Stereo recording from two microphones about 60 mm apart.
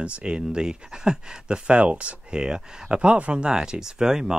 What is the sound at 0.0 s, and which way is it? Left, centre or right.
Speech, centre.